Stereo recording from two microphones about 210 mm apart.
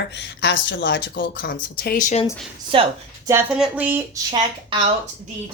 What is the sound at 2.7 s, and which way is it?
Speech, 25° right (ahead or behind).